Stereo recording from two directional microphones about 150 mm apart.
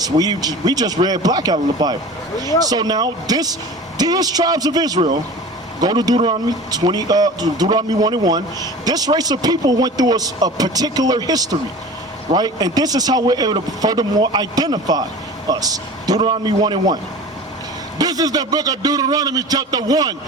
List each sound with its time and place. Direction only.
0.0 s speech: 25° right (ahead or behind)